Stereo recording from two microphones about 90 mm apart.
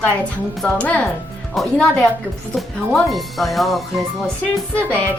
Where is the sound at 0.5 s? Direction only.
5° left (ahead or behind).